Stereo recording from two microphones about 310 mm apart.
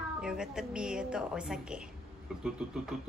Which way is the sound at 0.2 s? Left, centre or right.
Centre.